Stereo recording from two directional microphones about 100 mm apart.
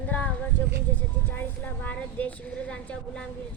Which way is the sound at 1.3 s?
20° left (ahead or behind).